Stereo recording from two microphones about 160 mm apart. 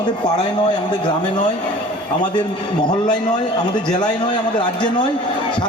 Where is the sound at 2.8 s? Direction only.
25° left (ahead or behind).